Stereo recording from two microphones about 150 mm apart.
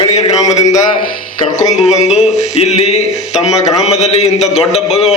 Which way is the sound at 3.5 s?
20° left (ahead or behind).